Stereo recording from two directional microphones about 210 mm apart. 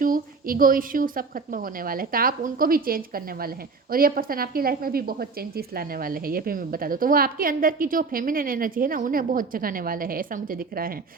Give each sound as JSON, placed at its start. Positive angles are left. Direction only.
{"t": 0.0, "sound": "a woman's voice", "side_deg": -40}